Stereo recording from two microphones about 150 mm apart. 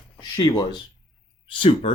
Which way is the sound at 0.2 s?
30° left (ahead or behind).